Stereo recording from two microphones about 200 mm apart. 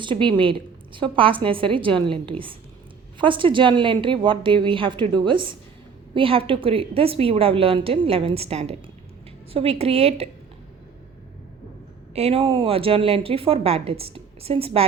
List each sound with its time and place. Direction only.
0.0 s speech: 25° right (ahead or behind)
12.1 s speech: 30° right (ahead or behind)